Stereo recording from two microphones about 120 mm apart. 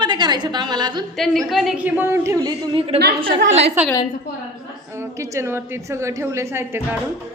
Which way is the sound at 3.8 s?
15° right (ahead or behind).